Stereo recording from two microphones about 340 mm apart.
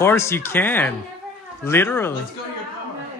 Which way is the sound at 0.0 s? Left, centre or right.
Centre.